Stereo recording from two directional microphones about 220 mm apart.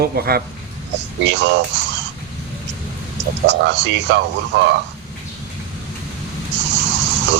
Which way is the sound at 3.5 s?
55° right (ahead or behind).